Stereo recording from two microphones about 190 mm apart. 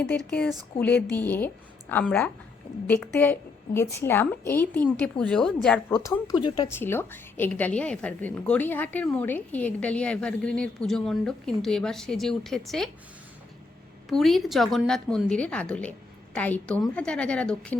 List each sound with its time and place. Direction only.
0.3 s a woman's voice: 5° left (ahead or behind)
6.2 s a woman's voice: 20° left (ahead or behind); by 12.9 s centre (ahead or behind)
14.1 s a woman's voice: centre (ahead or behind)